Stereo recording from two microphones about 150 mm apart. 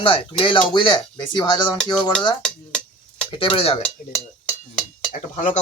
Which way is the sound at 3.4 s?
35° left (ahead or behind).